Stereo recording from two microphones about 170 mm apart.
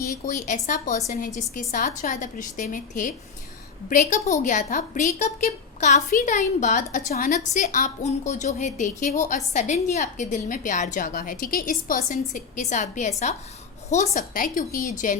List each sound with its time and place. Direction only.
0.4 s a woman's voice: 45° left (ahead or behind)